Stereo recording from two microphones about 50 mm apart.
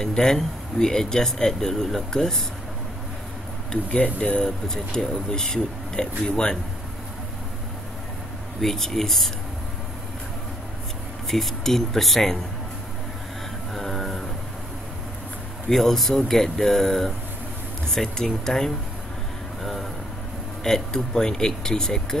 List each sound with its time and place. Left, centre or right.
0.0 s speech: centre
3.7 s speech: centre
8.5 s speech: centre
11.2 s speech: centre
13.7 s music: centre
15.7 s speech: centre